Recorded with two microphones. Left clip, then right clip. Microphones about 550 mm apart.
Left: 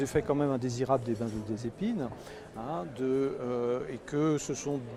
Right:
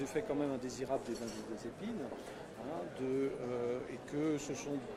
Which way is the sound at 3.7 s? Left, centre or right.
Left.